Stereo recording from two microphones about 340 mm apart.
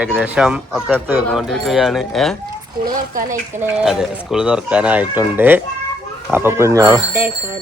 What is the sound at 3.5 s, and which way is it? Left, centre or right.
Speech, centre.